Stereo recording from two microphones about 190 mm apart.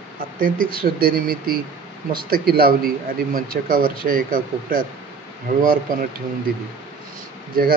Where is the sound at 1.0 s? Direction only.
50° right (ahead or behind).